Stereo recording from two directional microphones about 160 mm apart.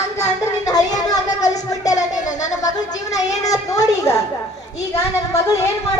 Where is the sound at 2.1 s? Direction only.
50° left (ahead or behind).